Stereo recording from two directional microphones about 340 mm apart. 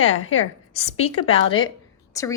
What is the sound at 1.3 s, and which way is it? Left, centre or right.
A woman's voice, centre.